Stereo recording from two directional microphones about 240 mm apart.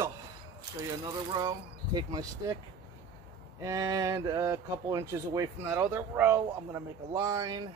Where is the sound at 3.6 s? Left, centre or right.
Centre.